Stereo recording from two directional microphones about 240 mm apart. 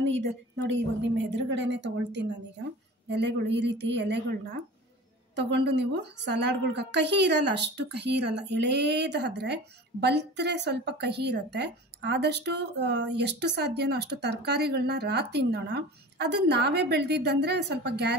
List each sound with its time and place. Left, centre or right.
0.0 s a woman's voice: right